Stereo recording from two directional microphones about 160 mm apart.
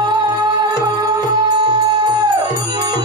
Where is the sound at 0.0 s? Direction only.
30° right (ahead or behind).